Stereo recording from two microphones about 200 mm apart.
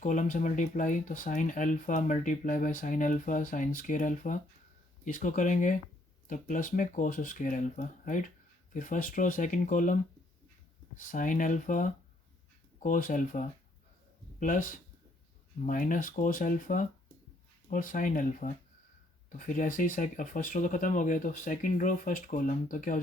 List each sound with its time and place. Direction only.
0.0 s speech: 40° left (ahead or behind)